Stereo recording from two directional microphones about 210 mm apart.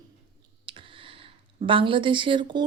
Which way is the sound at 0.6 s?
25° right (ahead or behind).